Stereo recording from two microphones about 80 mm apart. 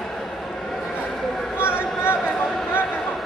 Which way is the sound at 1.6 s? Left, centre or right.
Left.